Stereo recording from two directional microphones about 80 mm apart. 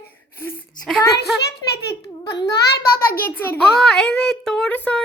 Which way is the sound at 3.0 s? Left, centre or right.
Left.